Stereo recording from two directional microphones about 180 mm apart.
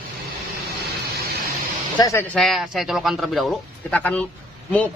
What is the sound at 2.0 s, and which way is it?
Speech, 20° left (ahead or behind).